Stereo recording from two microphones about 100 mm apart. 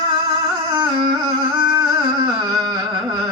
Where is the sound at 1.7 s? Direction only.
30° right (ahead or behind).